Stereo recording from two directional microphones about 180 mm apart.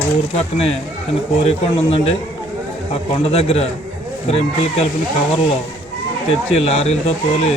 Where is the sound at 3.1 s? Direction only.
35° left (ahead or behind).